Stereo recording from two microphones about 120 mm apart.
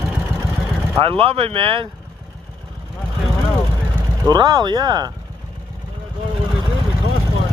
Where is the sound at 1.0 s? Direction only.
50° right (ahead or behind).